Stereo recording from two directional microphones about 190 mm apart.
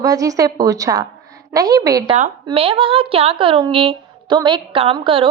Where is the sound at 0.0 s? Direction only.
20° right (ahead or behind).